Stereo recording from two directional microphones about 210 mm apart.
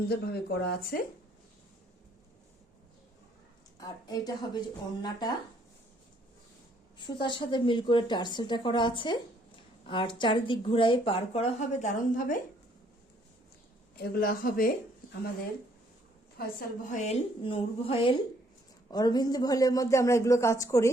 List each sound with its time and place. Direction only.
0.1 s speech: 50° left (ahead or behind)
3.8 s speech: 20° left (ahead or behind)
7.0 s speech: 20° left (ahead or behind); by 12.4 s 40° left (ahead or behind)
14.0 s speech: 45° left (ahead or behind)
16.4 s speech: 45° left (ahead or behind)
17.1 s speech: 25° left (ahead or behind)